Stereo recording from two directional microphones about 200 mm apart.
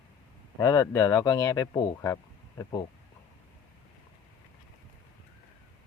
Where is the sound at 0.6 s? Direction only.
15° left (ahead or behind).